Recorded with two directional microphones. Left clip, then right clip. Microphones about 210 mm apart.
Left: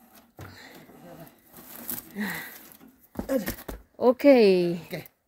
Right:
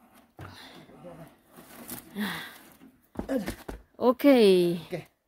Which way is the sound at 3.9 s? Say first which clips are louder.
Left 3 dB; 5° right (ahead or behind).